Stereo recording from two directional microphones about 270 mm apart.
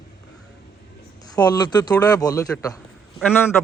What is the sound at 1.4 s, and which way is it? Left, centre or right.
A man's voice, centre.